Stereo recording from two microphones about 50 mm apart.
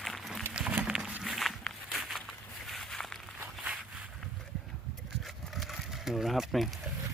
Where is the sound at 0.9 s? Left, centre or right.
Centre.